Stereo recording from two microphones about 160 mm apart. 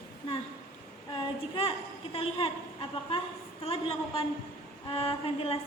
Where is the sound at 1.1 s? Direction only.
30° left (ahead or behind).